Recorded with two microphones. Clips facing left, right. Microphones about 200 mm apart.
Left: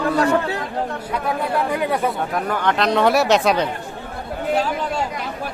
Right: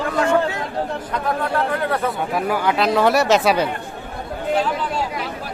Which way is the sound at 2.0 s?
5° right (ahead or behind).